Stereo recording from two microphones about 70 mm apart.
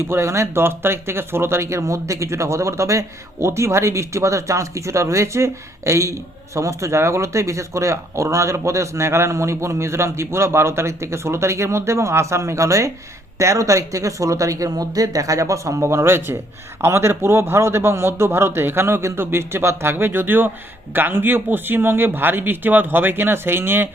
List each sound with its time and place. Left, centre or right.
0.0 s a man's voice: right